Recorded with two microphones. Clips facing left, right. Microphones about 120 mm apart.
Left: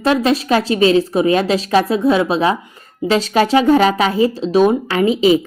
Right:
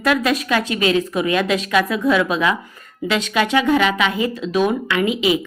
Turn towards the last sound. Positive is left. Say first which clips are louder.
# left 5 dB
turn(degrees=35)  # may be behind; listen again after turning